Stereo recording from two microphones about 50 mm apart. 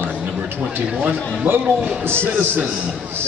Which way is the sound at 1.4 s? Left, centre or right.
Right.